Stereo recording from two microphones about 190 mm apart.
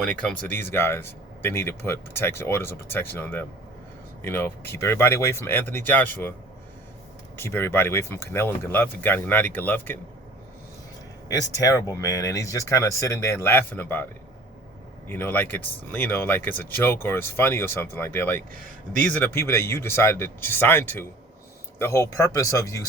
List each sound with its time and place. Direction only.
0.0 s speech: 5° left (ahead or behind)
7.3 s speech: 10° left (ahead or behind)
11.3 s speech: 15° left (ahead or behind)